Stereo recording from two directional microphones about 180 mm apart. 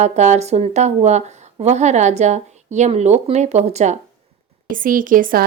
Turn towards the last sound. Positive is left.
turn(degrees=-50)  # may be behind; listen again after turning